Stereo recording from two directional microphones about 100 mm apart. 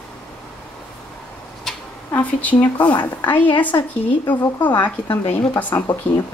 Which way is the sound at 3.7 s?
30° left (ahead or behind).